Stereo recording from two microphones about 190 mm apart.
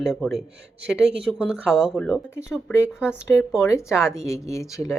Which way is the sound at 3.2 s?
15° left (ahead or behind).